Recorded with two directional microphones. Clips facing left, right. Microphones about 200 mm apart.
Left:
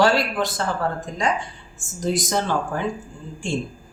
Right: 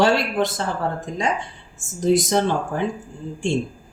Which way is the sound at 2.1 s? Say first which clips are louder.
Right 3 dB; 20° right (ahead or behind).